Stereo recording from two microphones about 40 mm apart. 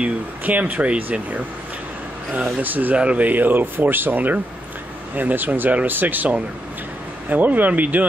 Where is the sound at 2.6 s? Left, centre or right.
Right.